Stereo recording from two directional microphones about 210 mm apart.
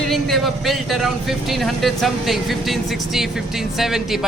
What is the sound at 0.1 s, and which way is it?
Speech, centre (ahead or behind).